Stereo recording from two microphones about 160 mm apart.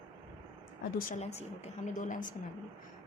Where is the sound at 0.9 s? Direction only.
60° left (ahead or behind).